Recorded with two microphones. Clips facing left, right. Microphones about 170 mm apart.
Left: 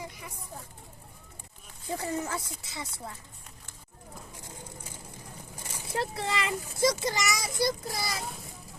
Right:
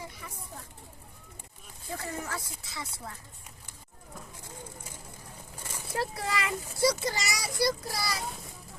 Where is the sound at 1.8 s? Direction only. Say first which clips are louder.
Left 4 dB; 20° left (ahead or behind).